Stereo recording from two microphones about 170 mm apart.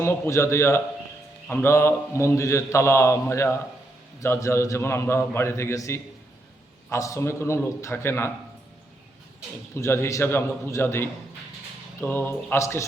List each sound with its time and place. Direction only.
0.0 s a man's voice: 15° left (ahead or behind)
9.7 s a man's voice: 15° left (ahead or behind)